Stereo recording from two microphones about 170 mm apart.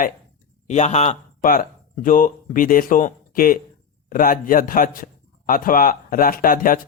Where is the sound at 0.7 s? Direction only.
45° left (ahead or behind).